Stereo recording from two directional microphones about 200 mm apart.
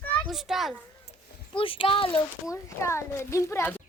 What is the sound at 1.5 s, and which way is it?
A child's voice, 25° left (ahead or behind).